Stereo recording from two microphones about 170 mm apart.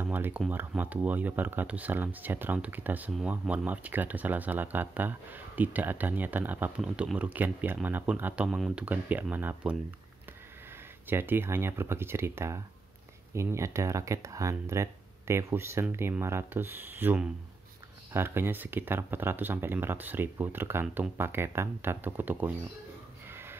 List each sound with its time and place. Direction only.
0.0 s speech: 10° right (ahead or behind)
11.1 s speech: 15° right (ahead or behind)
23.2 s a sound: 15° right (ahead or behind)